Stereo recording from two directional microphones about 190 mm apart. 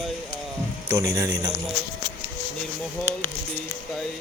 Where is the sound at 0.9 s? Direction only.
15° right (ahead or behind).